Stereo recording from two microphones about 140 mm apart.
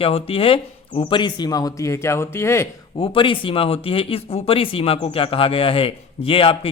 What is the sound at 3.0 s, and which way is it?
Speech, 40° left (ahead or behind).